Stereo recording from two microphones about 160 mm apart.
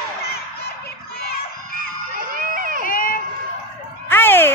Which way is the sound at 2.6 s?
60° right (ahead or behind).